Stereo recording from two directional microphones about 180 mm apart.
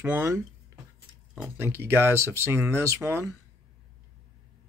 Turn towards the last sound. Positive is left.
turn(degrees=-10)  # may be behind; listen again after turning